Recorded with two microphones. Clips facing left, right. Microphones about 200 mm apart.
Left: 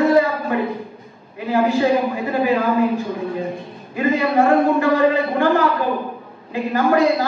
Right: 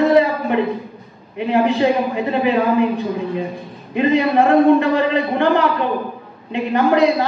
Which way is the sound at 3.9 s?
20° right (ahead or behind).